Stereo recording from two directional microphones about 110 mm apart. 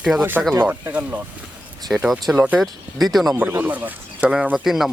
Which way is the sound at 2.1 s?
Centre (ahead or behind).